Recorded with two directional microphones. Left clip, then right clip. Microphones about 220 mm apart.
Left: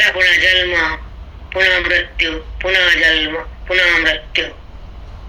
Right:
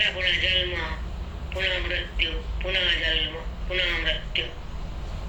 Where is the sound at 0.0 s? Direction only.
45° left (ahead or behind).